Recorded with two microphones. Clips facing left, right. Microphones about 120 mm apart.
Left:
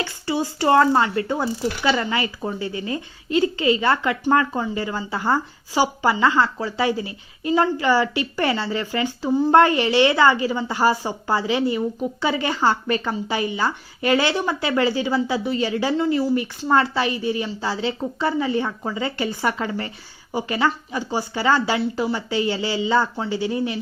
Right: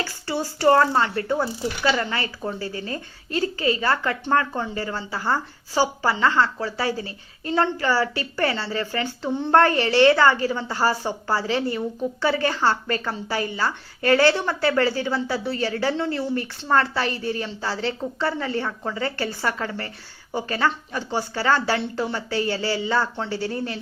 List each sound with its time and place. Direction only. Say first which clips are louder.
0.0 s speech: left 3 dB; 20° left (ahead or behind)